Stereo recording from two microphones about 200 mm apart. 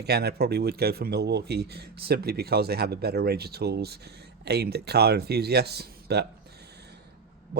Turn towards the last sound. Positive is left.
turn(degrees=-55)  # may be behind; listen again after turning